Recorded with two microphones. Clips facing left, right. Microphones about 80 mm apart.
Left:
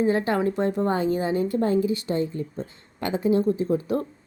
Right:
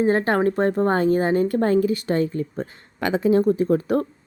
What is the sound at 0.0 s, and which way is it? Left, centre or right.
A woman's voice, right.